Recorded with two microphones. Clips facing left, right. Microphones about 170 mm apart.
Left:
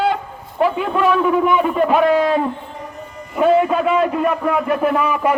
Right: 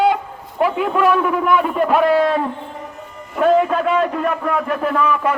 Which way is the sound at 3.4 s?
5° left (ahead or behind).